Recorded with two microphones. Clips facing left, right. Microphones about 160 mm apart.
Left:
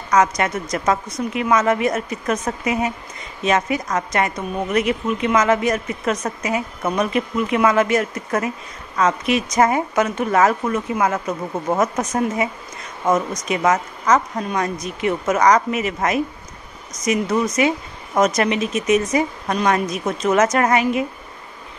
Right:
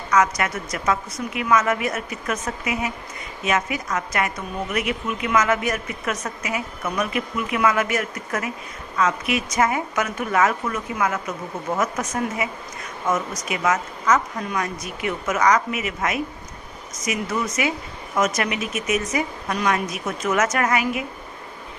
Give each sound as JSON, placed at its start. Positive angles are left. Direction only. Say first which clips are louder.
{"t": 0.1, "sound": "a woman's voice", "louder": "left 3 dB", "side_deg": 30}
{"t": 13.5, "sound": "a woman's voice", "louder": "left 4 dB", "side_deg": 35}